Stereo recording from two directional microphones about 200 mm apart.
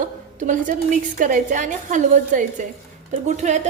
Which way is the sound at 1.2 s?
40° right (ahead or behind).